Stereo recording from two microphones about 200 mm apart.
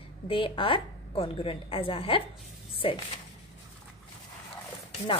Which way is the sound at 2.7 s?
25° left (ahead or behind).